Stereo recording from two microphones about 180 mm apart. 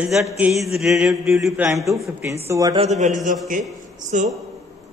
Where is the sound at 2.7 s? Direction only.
35° right (ahead or behind).